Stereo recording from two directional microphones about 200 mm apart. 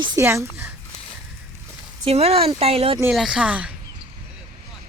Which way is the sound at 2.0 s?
30° right (ahead or behind).